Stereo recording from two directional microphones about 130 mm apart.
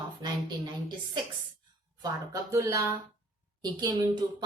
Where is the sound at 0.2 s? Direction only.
35° right (ahead or behind).